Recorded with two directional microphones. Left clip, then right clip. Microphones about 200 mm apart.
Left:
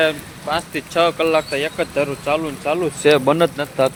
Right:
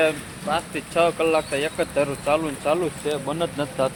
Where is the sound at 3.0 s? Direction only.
40° left (ahead or behind).